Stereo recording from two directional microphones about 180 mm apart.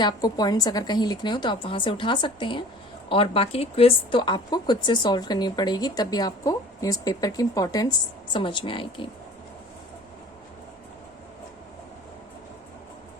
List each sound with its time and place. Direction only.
0.0 s speech: 20° left (ahead or behind)